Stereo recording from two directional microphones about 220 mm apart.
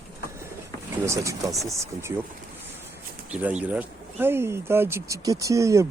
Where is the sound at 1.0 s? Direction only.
15° right (ahead or behind).